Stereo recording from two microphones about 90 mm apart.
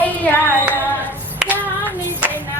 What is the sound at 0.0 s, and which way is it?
Music, 20° left (ahead or behind).